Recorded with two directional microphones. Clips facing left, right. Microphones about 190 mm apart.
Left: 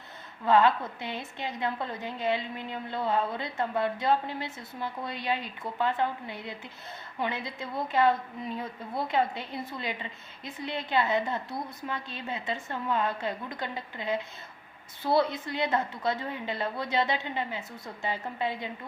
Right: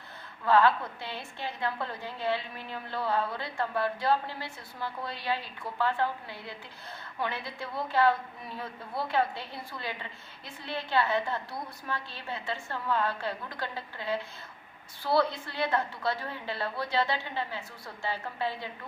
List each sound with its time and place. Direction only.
0.4 s a woman's voice: 20° left (ahead or behind)